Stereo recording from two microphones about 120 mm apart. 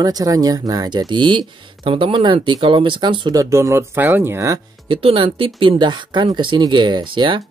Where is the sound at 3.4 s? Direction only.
25° right (ahead or behind).